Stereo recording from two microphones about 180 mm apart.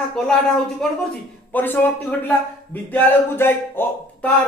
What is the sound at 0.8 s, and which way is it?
A man's voice, 5° left (ahead or behind).